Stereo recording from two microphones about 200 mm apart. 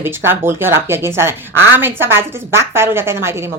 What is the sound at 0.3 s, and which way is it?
Speech, 10° right (ahead or behind).